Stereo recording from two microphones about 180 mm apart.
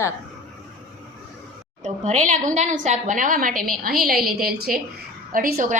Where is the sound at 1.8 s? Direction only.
40° right (ahead or behind).